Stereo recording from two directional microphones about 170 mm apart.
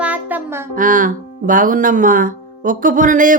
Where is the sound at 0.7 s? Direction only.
50° right (ahead or behind).